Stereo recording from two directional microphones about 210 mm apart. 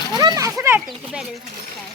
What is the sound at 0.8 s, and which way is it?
Speech, centre (ahead or behind).